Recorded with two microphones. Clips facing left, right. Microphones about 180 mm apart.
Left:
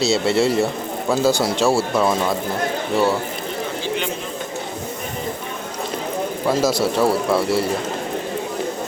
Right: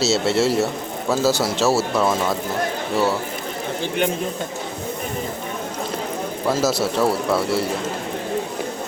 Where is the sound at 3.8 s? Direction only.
55° right (ahead or behind).